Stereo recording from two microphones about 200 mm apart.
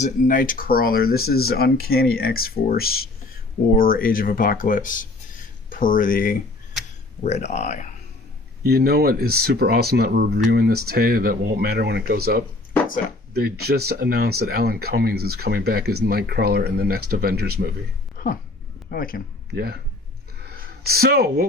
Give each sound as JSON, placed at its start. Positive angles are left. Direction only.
{"t": 0.0, "sound": "speech", "side_deg": 40}
{"t": 8.6, "sound": "speech", "side_deg": -50}
{"t": 18.2, "sound": "a sound", "side_deg": 45}
{"t": 18.9, "sound": "speech", "side_deg": 45}
{"t": 19.5, "sound": "speech", "side_deg": -50}
{"t": 20.5, "sound": "a sound", "side_deg": -50}